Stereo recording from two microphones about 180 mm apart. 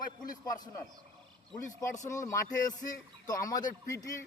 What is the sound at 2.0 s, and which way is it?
A man's voice, 15° left (ahead or behind).